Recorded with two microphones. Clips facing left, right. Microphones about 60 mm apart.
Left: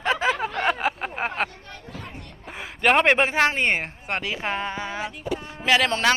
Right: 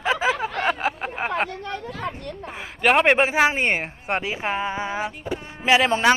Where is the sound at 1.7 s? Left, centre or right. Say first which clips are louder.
Right 9 dB; right.